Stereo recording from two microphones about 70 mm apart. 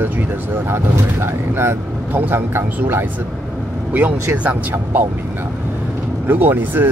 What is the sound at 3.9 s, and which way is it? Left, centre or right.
Speech, right.